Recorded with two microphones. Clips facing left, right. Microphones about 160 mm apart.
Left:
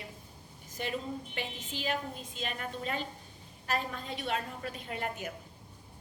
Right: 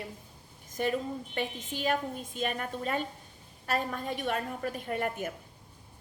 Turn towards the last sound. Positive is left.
turn(degrees=-50)  # may be behind; listen again after turning